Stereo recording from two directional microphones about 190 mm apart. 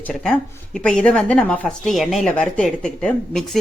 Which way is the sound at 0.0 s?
5° left (ahead or behind).